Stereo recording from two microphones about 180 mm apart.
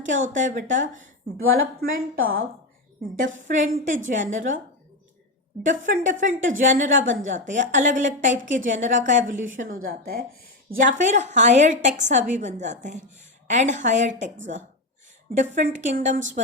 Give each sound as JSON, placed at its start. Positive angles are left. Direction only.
{"t": 0.0, "sound": "a woman's voice", "side_deg": -45}
{"t": 5.6, "sound": "a woman's voice", "side_deg": -45}
{"t": 10.8, "sound": "a woman's voice", "side_deg": -45}
{"t": 15.4, "sound": "a woman's voice", "side_deg": -45}